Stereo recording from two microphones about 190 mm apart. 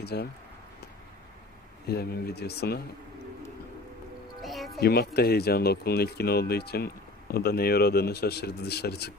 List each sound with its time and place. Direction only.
0.0 s speech: 60° left (ahead or behind)
1.9 s speech: 55° left (ahead or behind)
4.4 s music: centre (ahead or behind)
4.7 s speech: 55° left (ahead or behind)